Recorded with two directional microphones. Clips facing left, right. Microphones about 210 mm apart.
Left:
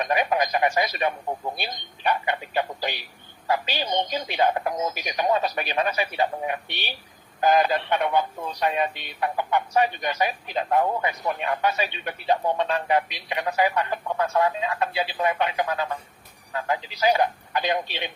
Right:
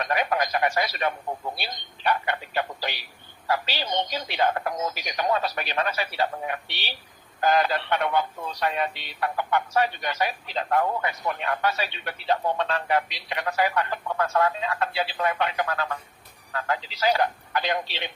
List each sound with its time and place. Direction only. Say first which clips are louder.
0.0 s a man's voice: left 2 dB; 15° left (ahead or behind)